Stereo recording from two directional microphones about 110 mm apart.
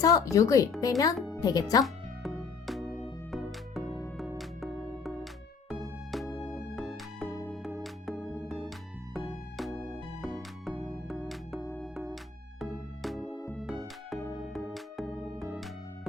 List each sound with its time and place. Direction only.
0.0 s speech: 30° left (ahead or behind)
1.8 s music: centre (ahead or behind)